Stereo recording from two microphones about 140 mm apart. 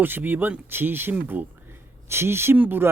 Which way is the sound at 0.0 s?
15° right (ahead or behind).